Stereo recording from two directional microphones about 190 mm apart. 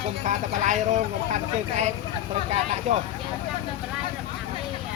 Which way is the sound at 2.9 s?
35° right (ahead or behind).